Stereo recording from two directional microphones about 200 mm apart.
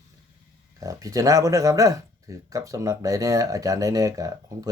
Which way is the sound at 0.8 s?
15° right (ahead or behind).